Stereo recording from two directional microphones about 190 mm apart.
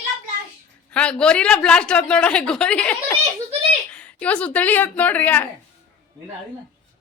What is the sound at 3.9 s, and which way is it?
Speech, 5° left (ahead or behind).